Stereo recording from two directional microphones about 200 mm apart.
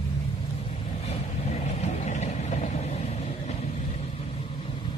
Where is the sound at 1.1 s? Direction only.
35° left (ahead or behind).